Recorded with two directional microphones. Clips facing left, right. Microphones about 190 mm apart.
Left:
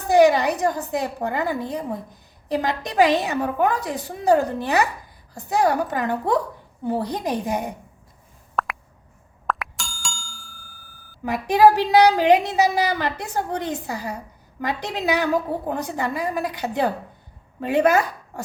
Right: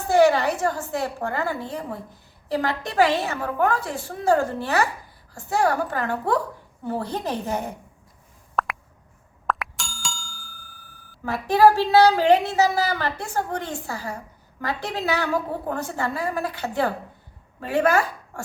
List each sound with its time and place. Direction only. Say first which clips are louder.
0.1 s a woman's voice: left 2 dB; 15° left (ahead or behind)
8.6 s plop: even; centre (ahead or behind)
9.5 s bicycle bell: even; centre (ahead or behind)
11.2 s a woman's voice: left 1 dB; 15° left (ahead or behind)